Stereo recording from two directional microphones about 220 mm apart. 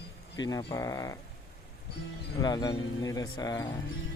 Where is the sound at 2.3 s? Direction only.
15° left (ahead or behind).